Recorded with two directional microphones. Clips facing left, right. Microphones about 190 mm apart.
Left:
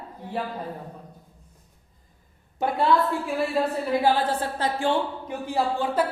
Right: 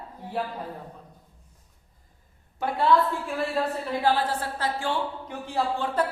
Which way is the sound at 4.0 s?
20° left (ahead or behind).